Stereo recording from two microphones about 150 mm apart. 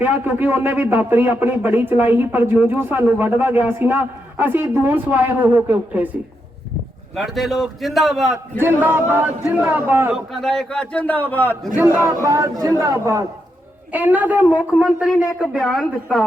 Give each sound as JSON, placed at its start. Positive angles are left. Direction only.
{"t": 0.0, "sound": "a man's voice", "side_deg": -10}
{"t": 7.2, "sound": "a woman's voice", "side_deg": 0}
{"t": 8.5, "sound": "a man's voice", "side_deg": -15}
{"t": 10.4, "sound": "a man's voice", "side_deg": 5}
{"t": 12.2, "sound": "speech", "side_deg": -25}
{"t": 13.9, "sound": "a man's voice", "side_deg": -10}